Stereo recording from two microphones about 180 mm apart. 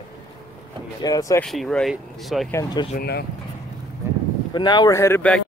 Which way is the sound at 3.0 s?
65° left (ahead or behind).